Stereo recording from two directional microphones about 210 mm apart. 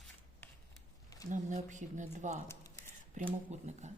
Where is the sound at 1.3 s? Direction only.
35° right (ahead or behind).